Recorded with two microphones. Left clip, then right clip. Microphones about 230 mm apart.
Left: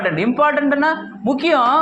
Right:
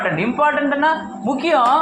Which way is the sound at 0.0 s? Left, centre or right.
Left.